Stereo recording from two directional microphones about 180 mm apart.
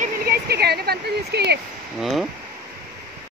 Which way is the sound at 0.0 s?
55° right (ahead or behind).